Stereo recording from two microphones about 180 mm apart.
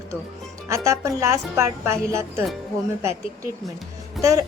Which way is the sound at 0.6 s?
15° right (ahead or behind).